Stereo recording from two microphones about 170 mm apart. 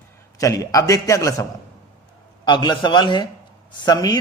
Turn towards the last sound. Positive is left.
turn(degrees=25)  # may be behind; listen again after turning